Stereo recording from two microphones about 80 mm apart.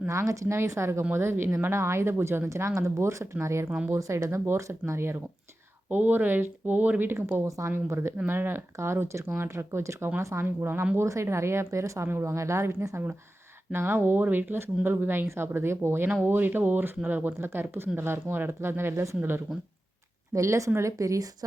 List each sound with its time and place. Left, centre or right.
0.1 s speech: right
3.7 s speech: centre
3.9 s speech: right
5.9 s speech: right
7.4 s speech: right